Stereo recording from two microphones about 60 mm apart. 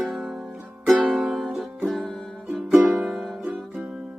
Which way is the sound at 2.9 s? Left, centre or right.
Centre.